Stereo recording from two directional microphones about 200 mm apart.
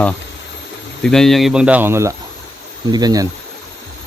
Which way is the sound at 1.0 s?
Centre (ahead or behind).